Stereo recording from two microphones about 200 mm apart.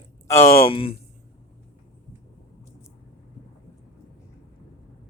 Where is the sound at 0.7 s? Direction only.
25° left (ahead or behind).